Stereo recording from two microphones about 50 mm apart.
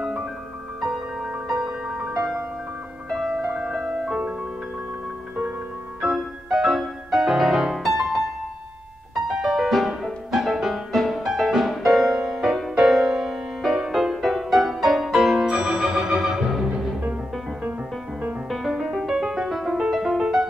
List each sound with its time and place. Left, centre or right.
0.0 s music: centre
3.1 s music: centre
5.9 s music: centre
15.4 s music: centre
18.5 s music: centre